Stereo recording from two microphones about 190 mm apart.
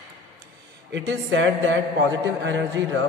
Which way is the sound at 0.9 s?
70° right (ahead or behind).